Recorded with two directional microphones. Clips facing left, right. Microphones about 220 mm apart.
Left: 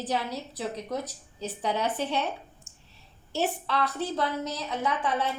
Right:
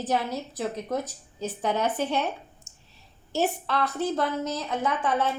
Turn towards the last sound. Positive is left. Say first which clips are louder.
# right 2 dB
turn(degrees=-50)  # may be behind; listen again after turning